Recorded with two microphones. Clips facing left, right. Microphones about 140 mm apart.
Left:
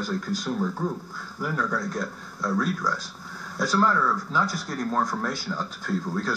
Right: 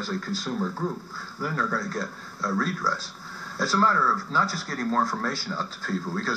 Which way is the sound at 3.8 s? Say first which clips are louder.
Right 1 dB; 15° left (ahead or behind).